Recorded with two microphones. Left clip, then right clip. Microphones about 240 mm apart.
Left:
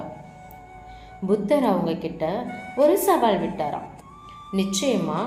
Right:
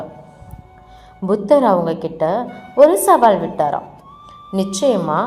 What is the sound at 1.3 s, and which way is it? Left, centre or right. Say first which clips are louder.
Speech: right 8 dB; right.